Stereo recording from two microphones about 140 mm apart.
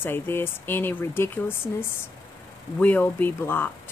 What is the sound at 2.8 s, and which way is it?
Speech, 15° left (ahead or behind).